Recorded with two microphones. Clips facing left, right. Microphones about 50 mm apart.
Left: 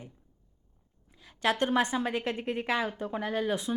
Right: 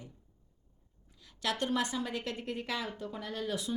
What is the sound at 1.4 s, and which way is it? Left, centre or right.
A woman's voice, left.